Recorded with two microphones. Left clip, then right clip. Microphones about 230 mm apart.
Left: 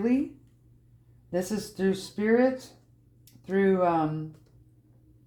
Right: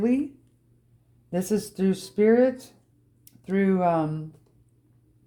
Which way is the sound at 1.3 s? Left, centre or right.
Right.